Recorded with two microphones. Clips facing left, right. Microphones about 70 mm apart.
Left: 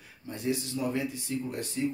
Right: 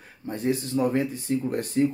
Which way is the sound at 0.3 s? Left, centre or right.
Right.